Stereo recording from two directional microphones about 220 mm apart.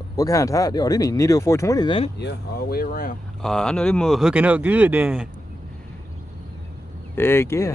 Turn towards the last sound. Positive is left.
turn(degrees=10)  # may be behind; listen again after turning